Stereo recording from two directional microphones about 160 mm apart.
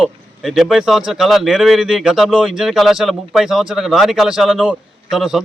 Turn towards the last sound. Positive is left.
turn(degrees=0)  # may be behind; listen again after turning